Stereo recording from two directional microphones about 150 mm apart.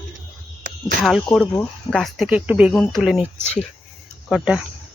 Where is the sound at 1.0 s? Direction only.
Centre (ahead or behind).